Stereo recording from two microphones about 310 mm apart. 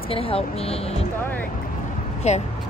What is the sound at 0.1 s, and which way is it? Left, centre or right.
Speech, centre.